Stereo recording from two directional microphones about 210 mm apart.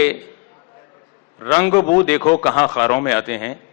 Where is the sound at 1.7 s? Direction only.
25° left (ahead or behind).